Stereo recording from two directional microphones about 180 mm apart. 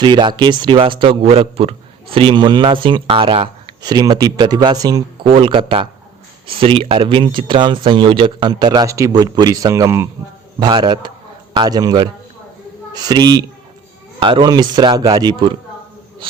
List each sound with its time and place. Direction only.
0.0 s speech: 25° right (ahead or behind)